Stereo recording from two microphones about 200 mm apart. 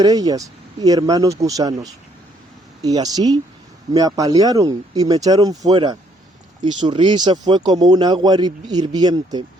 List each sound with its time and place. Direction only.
0.0 s speech: 20° right (ahead or behind)